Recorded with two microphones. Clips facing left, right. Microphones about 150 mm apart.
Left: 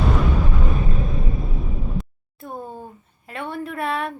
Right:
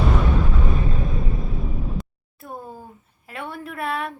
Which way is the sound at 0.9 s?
Centre (ahead or behind).